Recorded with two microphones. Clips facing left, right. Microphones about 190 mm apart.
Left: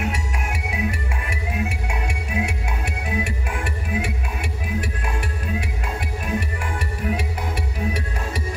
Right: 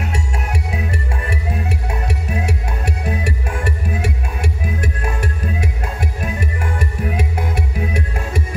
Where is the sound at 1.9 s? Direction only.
40° right (ahead or behind).